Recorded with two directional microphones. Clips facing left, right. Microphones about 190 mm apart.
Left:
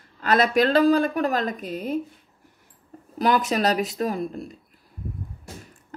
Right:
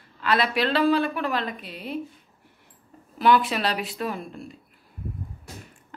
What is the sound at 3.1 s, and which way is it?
Speech, 40° left (ahead or behind).